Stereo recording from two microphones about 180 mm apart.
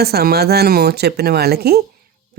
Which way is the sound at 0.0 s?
60° right (ahead or behind).